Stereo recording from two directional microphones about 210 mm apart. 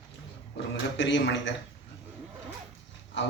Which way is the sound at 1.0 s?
60° left (ahead or behind).